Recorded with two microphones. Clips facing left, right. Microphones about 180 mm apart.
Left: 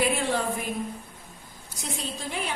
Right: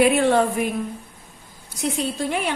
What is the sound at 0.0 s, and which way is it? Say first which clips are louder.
Speech: right 9 dB; 65° right (ahead or behind).